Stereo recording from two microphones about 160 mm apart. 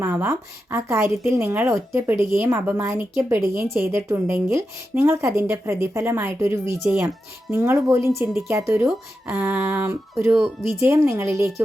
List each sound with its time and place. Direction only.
0.0 s a woman's voice: 15° right (ahead or behind)